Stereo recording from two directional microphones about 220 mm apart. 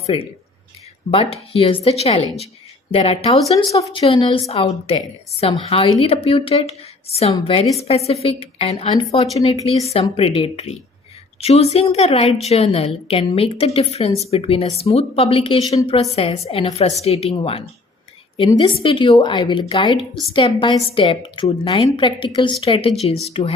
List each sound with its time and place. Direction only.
0.0 s speech: 25° left (ahead or behind)
1.3 s a woman's voice: 25° left (ahead or behind)
3.5 s a woman's voice: 15° left (ahead or behind)
18.3 s a woman's voice: 25° left (ahead or behind)